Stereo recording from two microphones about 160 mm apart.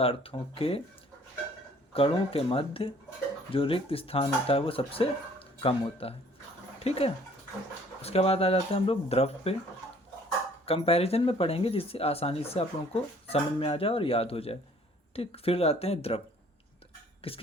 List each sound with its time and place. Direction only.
0.0 s speech: 35° left (ahead or behind)
1.9 s speech: 35° left (ahead or behind)
10.7 s speech: 40° left (ahead or behind)
17.2 s speech: 35° left (ahead or behind)